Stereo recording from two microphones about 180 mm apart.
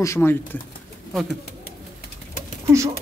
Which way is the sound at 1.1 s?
Centre (ahead or behind).